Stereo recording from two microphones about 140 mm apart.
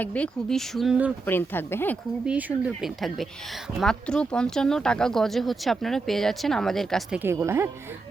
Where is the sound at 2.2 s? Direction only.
10° right (ahead or behind).